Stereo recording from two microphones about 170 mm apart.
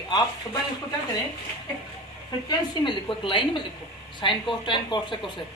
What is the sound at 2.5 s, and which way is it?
Speech, 30° left (ahead or behind).